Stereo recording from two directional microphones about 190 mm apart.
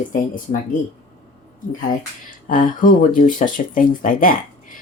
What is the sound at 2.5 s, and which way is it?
Speech, 45° left (ahead or behind).